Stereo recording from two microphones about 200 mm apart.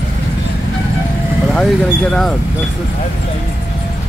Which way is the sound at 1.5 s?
Centre (ahead or behind).